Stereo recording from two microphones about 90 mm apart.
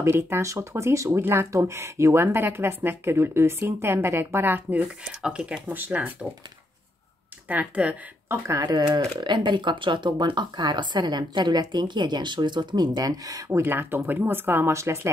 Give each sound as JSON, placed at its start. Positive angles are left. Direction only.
{"t": 0.1, "sound": "speech", "side_deg": -30}
{"t": 5.0, "sound": "speech", "side_deg": -10}
{"t": 5.7, "sound": "speech", "side_deg": -20}
{"t": 7.4, "sound": "speech", "side_deg": -15}
{"t": 8.3, "sound": "speech", "side_deg": -35}
{"t": 8.6, "sound": "speech", "side_deg": -50}